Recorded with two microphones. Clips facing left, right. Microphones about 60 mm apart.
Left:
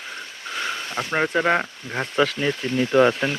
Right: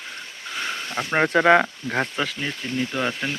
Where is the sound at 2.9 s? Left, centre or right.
Left.